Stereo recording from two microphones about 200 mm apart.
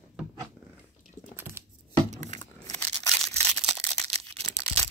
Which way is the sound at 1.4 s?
10° right (ahead or behind).